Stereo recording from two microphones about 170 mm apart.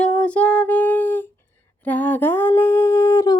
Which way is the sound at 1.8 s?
10° left (ahead or behind).